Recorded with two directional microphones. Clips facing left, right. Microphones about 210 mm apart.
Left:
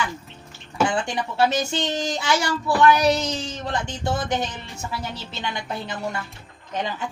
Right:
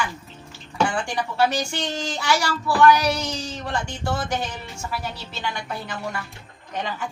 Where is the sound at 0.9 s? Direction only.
20° left (ahead or behind).